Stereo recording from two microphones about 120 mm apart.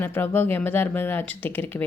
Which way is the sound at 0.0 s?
15° left (ahead or behind).